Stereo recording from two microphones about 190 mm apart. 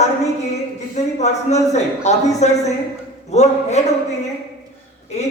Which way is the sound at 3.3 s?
35° left (ahead or behind).